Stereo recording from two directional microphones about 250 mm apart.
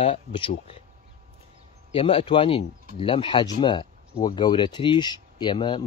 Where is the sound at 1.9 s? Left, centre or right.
Left.